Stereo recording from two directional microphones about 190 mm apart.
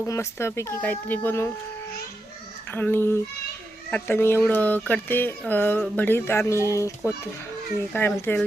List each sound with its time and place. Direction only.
0.0 s speech: 15° left (ahead or behind)
2.7 s speech: 10° left (ahead or behind)
8.2 s speech: 10° left (ahead or behind)